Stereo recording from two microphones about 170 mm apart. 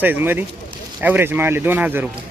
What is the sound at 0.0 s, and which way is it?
Speech, 10° right (ahead or behind).